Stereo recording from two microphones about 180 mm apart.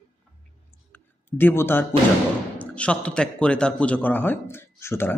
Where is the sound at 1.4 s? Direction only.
10° left (ahead or behind).